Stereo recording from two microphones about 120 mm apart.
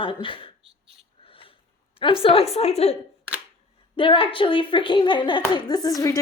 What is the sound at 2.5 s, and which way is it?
Speech, 65° left (ahead or behind).